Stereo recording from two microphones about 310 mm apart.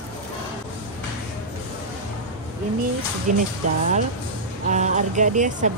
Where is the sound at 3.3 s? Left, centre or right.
Right.